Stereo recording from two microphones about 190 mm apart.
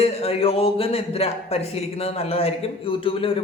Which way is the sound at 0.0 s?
30° left (ahead or behind).